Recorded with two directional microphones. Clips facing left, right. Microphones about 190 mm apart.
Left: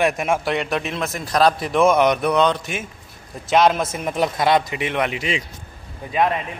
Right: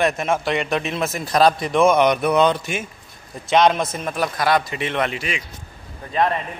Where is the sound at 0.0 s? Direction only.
10° left (ahead or behind).